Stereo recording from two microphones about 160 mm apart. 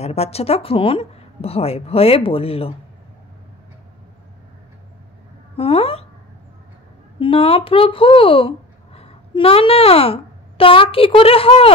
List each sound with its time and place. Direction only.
0.0 s a woman's voice: 40° left (ahead or behind)
5.6 s a woman's voice: 35° left (ahead or behind)
7.2 s speech: 35° left (ahead or behind)